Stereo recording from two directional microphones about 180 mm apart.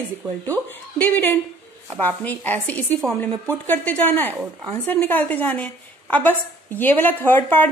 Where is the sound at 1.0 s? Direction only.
10° left (ahead or behind).